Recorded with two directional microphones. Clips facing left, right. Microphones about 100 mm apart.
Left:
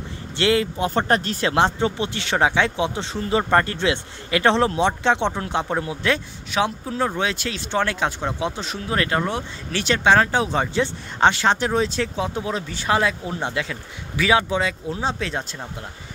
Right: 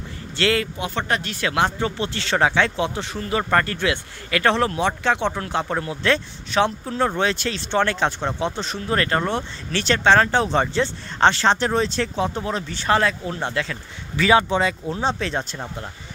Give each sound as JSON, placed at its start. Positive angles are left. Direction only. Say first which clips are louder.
{"t": 0.4, "sound": "speech", "louder": "left 2 dB", "side_deg": 20}
{"t": 0.7, "sound": "speech", "louder": "left 4 dB", "side_deg": 35}